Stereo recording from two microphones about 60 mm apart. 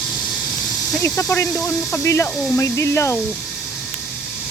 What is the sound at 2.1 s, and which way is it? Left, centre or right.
Speech, left.